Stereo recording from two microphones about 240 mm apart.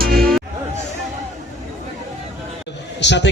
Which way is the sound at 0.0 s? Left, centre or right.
Right.